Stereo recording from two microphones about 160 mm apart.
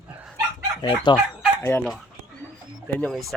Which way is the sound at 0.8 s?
30° left (ahead or behind).